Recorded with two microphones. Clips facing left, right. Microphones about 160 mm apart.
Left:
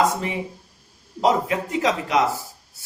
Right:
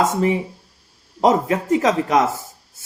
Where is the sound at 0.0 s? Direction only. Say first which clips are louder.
Right 4 dB; 40° right (ahead or behind).